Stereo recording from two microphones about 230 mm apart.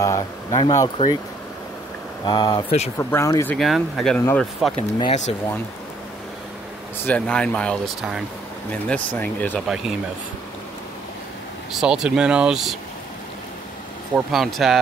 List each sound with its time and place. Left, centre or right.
0.0 s speech: centre
2.2 s speech: centre
3.0 s speech: centre
3.5 s speech: centre
4.7 s speech: left
7.1 s speech: centre
11.7 s speech: centre
14.1 s speech: centre